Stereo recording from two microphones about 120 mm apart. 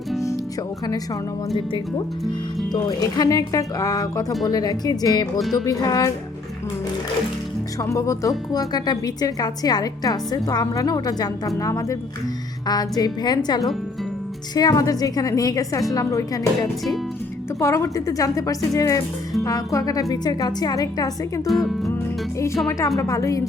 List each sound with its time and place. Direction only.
2.7 s a woman's voice: 30° left (ahead or behind)
7.8 s a woman's voice: 25° left (ahead or behind)
17.6 s a woman's voice: 25° left (ahead or behind)
21.4 s speech: centre (ahead or behind)
23.0 s a woman's voice: 25° left (ahead or behind)